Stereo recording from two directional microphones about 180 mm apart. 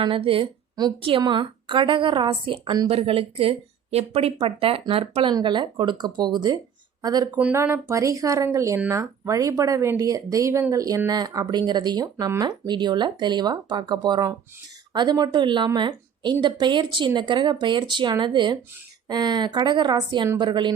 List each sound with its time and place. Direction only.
0.0 s a woman's voice: 30° right (ahead or behind)
7.3 s a woman's voice: 10° right (ahead or behind)